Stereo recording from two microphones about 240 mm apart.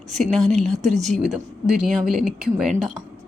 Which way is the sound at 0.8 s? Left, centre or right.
Right.